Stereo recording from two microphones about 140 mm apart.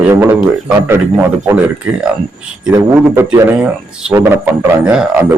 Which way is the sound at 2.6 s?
10° right (ahead or behind).